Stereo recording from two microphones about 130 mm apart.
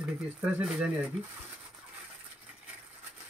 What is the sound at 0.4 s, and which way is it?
Speech, 10° right (ahead or behind).